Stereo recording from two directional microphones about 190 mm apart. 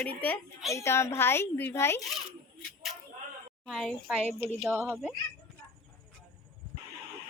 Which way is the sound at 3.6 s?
Centre (ahead or behind).